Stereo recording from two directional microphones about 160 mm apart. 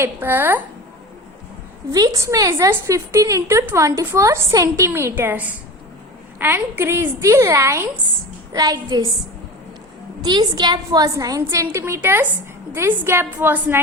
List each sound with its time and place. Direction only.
0.0 s a woman's voice: 15° right (ahead or behind)
1.9 s a woman's voice: 20° right (ahead or behind)
10.2 s a woman's voice: 25° right (ahead or behind)